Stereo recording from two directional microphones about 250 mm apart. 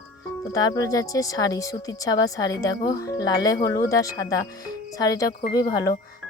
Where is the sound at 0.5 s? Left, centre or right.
Centre.